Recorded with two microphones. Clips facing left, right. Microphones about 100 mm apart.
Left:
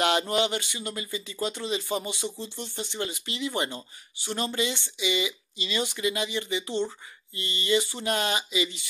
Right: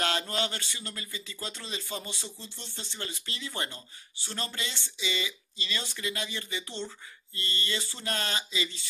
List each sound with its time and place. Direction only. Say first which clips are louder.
0.0 s speech: left 6 dB; 15° left (ahead or behind)